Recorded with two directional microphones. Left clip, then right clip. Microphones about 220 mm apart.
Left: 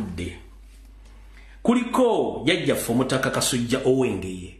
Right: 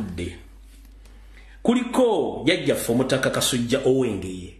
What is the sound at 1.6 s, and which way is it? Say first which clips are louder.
A man's voice: even; centre (ahead or behind).